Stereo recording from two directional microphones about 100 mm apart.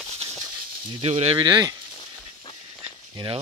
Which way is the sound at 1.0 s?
90° right.